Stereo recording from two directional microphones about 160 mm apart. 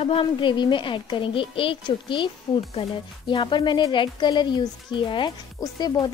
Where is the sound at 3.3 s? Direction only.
30° left (ahead or behind).